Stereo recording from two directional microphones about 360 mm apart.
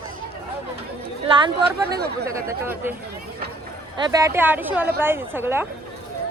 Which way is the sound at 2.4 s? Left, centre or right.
Centre.